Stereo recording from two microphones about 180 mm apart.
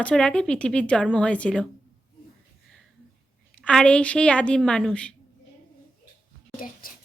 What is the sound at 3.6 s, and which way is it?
A woman's voice, 5° left (ahead or behind).